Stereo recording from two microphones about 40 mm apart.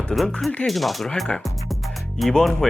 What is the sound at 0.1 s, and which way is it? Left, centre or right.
Speech, centre.